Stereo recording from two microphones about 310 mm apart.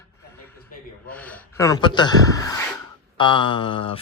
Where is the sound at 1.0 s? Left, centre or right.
Centre.